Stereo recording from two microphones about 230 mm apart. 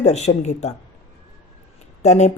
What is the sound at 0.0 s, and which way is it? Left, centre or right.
Speech, left.